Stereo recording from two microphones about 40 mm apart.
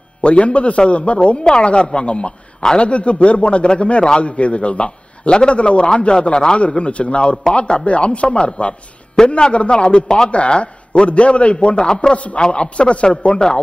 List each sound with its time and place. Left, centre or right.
0.2 s a man's voice: left
2.9 s a man's voice: left
10.3 s a man's voice: left